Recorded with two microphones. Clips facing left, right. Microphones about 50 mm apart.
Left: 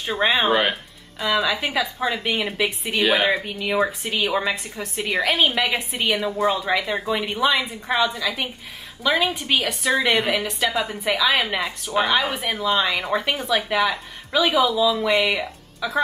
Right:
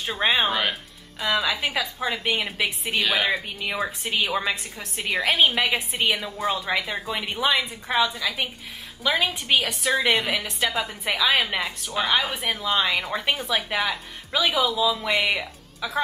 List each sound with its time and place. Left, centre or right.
0.2 s a woman's voice: centre
0.5 s a woman's voice: centre
1.2 s a woman's voice: centre
3.0 s a woman's voice: centre
3.4 s a woman's voice: centre